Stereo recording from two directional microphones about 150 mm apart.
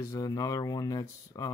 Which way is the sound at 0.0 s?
20° left (ahead or behind).